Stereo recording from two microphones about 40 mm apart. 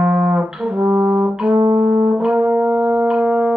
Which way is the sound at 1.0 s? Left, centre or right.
Right.